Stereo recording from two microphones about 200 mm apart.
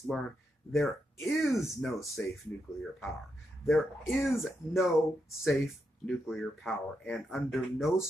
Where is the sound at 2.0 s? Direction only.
15° left (ahead or behind).